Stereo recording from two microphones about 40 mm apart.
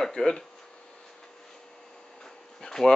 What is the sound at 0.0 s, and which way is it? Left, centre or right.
Speech, centre.